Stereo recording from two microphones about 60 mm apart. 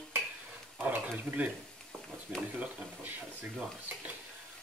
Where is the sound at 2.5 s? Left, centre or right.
Right.